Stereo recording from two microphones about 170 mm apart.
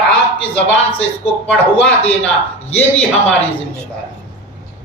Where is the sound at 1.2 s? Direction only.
10° left (ahead or behind).